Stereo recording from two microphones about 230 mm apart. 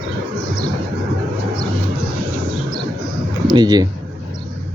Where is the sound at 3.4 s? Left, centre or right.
Centre.